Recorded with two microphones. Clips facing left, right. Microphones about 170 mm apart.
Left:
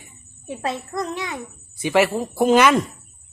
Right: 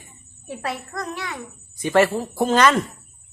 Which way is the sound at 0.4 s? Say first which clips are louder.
Left 2 dB; 20° left (ahead or behind).